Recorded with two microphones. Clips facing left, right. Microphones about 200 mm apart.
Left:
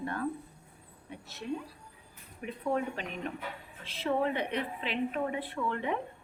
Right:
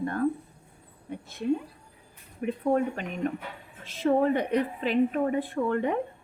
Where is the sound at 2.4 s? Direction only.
45° right (ahead or behind).